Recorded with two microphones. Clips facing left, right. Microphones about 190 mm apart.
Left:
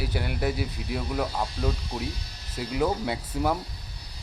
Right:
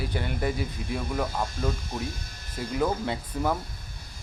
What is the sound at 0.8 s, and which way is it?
Speech, 50° right (ahead or behind).